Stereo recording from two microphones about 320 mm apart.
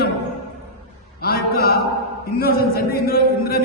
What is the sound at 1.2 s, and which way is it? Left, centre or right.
A man's voice, left.